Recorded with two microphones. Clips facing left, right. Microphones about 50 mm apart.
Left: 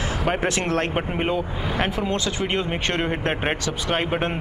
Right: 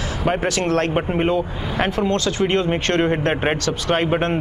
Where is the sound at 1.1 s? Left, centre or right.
Centre.